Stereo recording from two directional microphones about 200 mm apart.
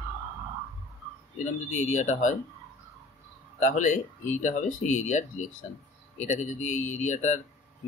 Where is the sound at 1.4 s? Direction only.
35° left (ahead or behind).